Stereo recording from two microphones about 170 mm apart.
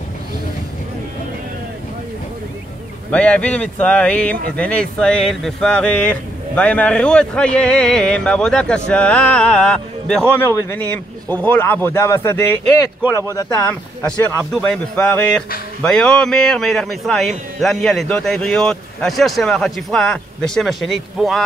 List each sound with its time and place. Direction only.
3.1 s speech: 5° left (ahead or behind)
14.6 s a man's voice: 5° left (ahead or behind)